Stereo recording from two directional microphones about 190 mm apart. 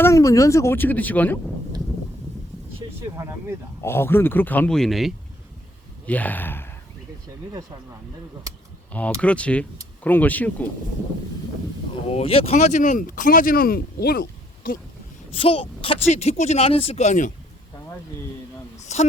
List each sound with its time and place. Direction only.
0.0 s speech: 15° left (ahead or behind)
3.2 s speech: 15° right (ahead or behind)
3.8 s speech: 10° left (ahead or behind)
8.9 s speech: 5° left (ahead or behind)
12.0 s speech: 30° left (ahead or behind); by 14.8 s 50° left (ahead or behind)
15.4 s speech: 30° left (ahead or behind)
18.8 s a sound: 35° left (ahead or behind)